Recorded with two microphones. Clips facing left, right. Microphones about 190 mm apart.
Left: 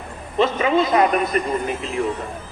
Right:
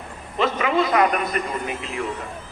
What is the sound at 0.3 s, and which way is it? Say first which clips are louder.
A man's voice: left 3 dB; 25° left (ahead or behind).